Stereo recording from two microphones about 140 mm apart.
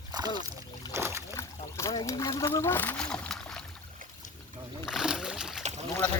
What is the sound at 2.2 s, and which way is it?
Speech, 25° left (ahead or behind).